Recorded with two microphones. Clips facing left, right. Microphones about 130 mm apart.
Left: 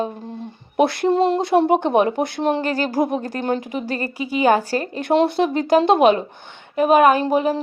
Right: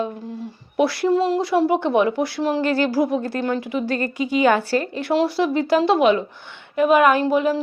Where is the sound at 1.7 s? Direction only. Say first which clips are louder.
Left 2 dB; 50° left (ahead or behind).